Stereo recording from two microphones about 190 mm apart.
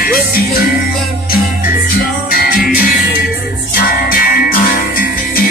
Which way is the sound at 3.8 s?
50° left (ahead or behind).